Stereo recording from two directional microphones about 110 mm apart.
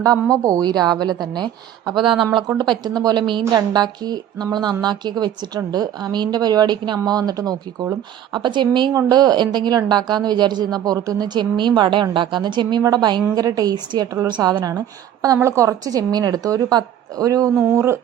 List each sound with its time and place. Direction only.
0.4 s a woman's voice: 35° right (ahead or behind)
2.6 s a woman's voice: 40° right (ahead or behind)
8.9 s a woman's voice: 35° right (ahead or behind)